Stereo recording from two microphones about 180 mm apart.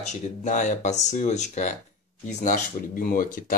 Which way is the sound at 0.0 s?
40° left (ahead or behind).